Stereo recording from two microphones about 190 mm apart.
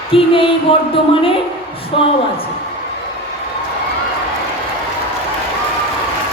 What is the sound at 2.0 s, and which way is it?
Speech, 30° left (ahead or behind).